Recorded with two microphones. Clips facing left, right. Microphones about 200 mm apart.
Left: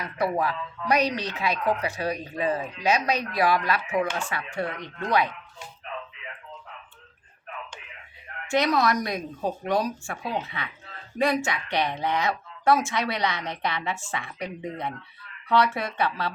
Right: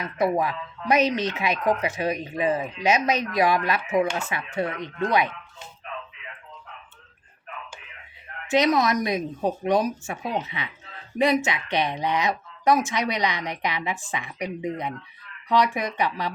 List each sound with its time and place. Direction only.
0.0 s speech: 20° right (ahead or behind)
8.4 s a woman's voice: 20° right (ahead or behind)